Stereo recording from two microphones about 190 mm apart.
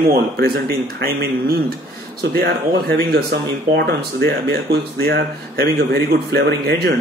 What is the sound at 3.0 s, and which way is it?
Speech, 55° right (ahead or behind).